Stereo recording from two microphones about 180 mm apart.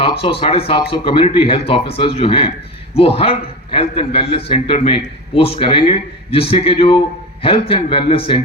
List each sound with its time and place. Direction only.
0.0 s a man's voice: 30° left (ahead or behind)